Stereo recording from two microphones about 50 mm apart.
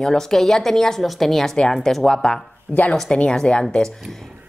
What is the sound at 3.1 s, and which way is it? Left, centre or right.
Speech, centre.